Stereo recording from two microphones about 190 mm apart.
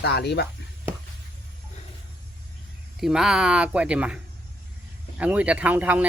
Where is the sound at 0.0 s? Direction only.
60° left (ahead or behind).